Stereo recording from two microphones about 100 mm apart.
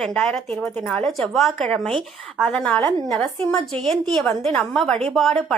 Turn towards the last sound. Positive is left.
turn(degrees=0)  # may be behind; listen again after turning